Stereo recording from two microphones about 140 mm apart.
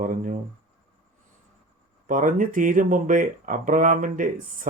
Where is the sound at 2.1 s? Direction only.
70° right (ahead or behind).